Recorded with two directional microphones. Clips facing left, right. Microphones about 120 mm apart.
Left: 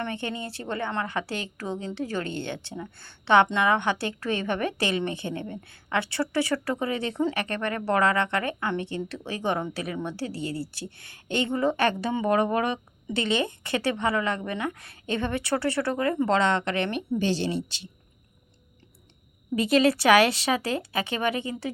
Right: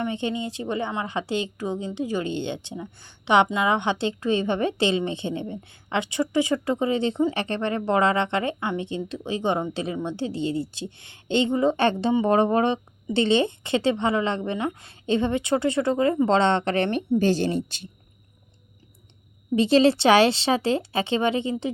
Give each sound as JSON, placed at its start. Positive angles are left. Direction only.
{"t": 0.0, "sound": "a woman's voice", "side_deg": -20}
{"t": 19.5, "sound": "speech", "side_deg": -30}